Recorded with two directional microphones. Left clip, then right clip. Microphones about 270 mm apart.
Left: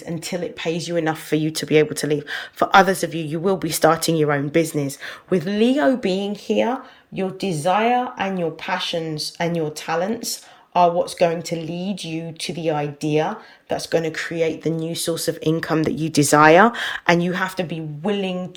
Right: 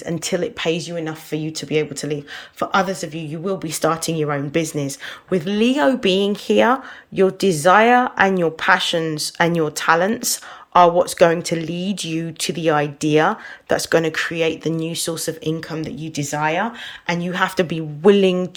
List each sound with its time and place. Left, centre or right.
0.3 s speech: centre
0.9 s speech: centre
17.2 s speech: centre
17.4 s speech: centre